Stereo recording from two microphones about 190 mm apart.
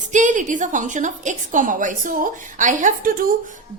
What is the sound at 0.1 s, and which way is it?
A woman's voice, 40° right (ahead or behind).